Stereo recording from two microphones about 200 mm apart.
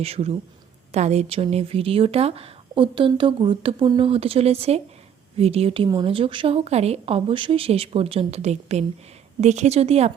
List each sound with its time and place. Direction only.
0.0 s a woman's voice: 30° right (ahead or behind)